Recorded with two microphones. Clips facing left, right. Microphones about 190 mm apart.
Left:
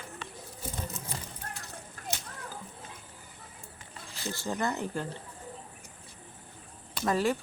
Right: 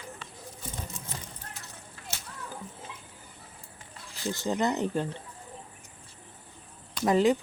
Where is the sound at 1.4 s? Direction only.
50° left (ahead or behind).